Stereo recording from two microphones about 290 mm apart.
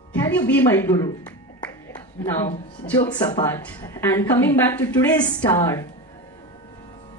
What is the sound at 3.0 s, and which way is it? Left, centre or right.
A woman's voice, centre.